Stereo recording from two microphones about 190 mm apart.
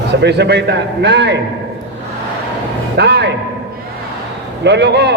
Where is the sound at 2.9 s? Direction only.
65° right (ahead or behind).